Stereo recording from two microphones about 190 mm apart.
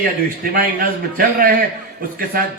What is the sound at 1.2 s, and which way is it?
Speech, 50° right (ahead or behind).